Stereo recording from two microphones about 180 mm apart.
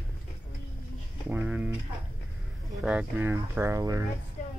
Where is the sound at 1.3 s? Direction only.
10° right (ahead or behind).